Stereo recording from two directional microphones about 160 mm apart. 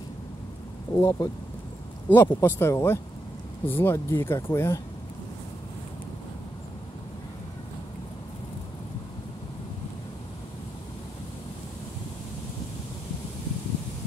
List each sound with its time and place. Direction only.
0.9 s speech: 20° left (ahead or behind)